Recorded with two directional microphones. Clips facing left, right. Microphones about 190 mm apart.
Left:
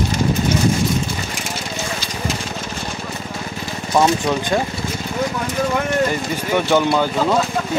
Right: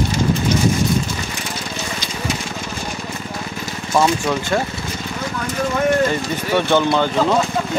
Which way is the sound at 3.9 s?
15° left (ahead or behind).